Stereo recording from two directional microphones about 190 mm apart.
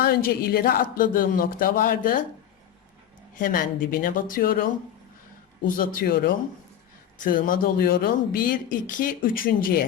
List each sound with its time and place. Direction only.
0.1 s speech: 55° left (ahead or behind)
3.3 s speech: 45° left (ahead or behind)